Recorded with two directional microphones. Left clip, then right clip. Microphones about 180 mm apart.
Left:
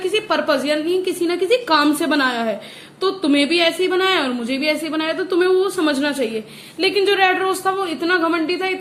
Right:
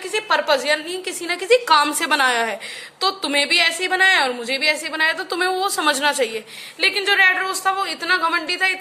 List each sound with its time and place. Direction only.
0.1 s a woman's voice: 20° right (ahead or behind)